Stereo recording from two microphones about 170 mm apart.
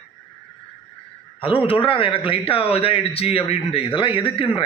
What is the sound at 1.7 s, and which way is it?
A man's voice, 30° left (ahead or behind).